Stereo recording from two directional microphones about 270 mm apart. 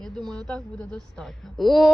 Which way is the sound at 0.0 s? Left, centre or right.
Centre.